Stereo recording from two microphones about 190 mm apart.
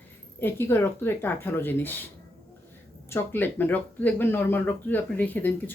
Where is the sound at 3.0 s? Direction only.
10° left (ahead or behind).